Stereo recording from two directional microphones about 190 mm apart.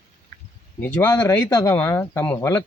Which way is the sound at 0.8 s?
10° left (ahead or behind).